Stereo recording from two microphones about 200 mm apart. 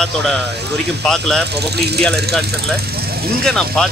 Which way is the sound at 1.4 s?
55° right (ahead or behind).